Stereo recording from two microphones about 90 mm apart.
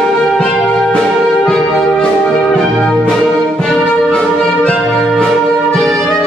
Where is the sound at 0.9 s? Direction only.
10° left (ahead or behind).